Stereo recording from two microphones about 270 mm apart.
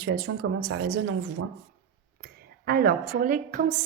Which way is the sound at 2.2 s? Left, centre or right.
Right.